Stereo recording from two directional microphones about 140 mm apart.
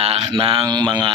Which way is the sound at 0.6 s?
30° right (ahead or behind).